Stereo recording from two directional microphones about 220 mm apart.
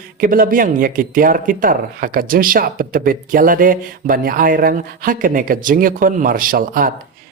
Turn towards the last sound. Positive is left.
turn(degrees=-40)  # may be behind; listen again after turning